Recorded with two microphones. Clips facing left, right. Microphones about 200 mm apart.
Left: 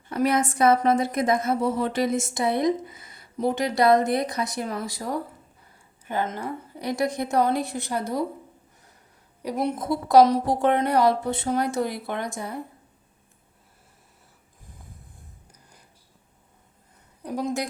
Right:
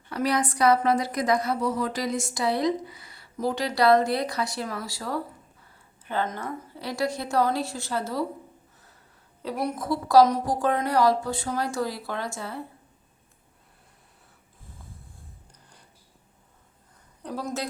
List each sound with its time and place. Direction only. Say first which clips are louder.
0.1 s a woman's voice: left 3 dB; 25° left (ahead or behind)
9.4 s a woman's voice: left 3 dB; 15° left (ahead or behind)
17.2 s speech: left 4 dB; 15° left (ahead or behind)